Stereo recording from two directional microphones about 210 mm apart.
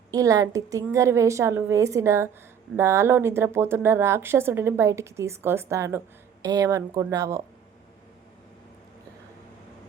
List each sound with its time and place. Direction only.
0.1 s speech: 15° right (ahead or behind)